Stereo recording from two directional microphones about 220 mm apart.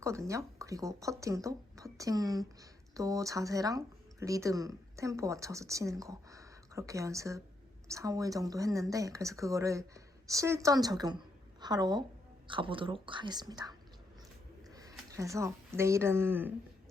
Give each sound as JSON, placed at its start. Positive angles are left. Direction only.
{"t": 0.0, "sound": "speech", "side_deg": -15}